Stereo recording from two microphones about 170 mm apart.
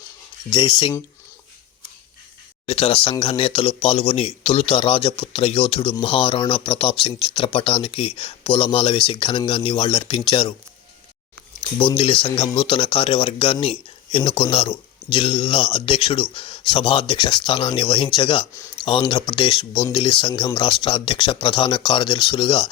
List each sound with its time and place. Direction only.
0.5 s speech: 30° left (ahead or behind)
2.6 s speech: 35° left (ahead or behind)
11.8 s speech: 30° left (ahead or behind)